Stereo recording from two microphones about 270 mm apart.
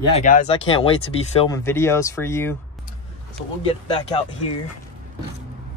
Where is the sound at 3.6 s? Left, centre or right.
Left.